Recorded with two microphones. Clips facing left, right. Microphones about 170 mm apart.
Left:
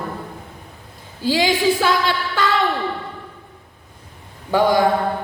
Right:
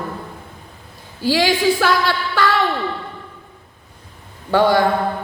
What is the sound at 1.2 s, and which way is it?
A woman's voice, 20° left (ahead or behind).